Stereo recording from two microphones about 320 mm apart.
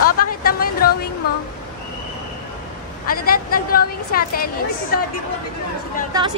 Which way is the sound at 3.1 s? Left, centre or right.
Left.